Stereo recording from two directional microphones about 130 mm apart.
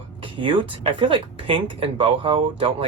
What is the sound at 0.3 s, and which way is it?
Speech, 40° right (ahead or behind).